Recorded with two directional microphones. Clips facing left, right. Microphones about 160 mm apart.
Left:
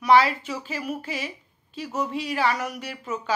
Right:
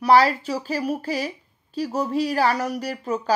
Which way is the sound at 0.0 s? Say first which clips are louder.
Right 2 dB; 40° right (ahead or behind).